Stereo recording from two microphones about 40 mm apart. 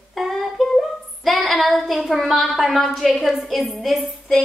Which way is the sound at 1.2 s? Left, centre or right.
Centre.